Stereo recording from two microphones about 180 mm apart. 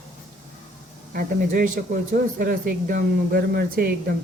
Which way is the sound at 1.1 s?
50° right (ahead or behind).